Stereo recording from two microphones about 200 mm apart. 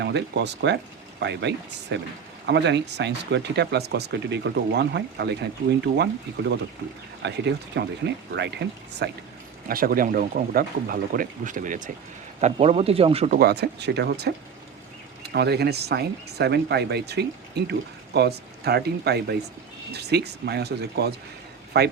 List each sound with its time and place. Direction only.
0.0 s speech: 60° right (ahead or behind)
7.2 s speech: 60° right (ahead or behind)
9.6 s speech: 45° right (ahead or behind)
13.4 s speech: 55° right (ahead or behind)